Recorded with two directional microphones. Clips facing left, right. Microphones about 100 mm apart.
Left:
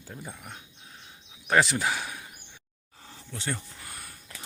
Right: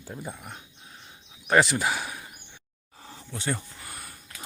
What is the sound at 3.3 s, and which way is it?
Speech, 10° right (ahead or behind).